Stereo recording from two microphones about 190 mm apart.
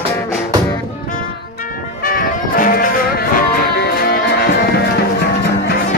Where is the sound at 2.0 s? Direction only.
50° left (ahead or behind).